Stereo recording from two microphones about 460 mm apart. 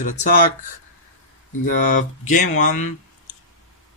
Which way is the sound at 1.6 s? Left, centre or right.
Centre.